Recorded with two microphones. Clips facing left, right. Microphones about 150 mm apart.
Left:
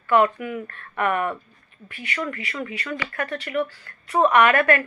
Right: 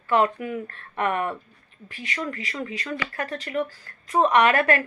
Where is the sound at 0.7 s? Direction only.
35° right (ahead or behind).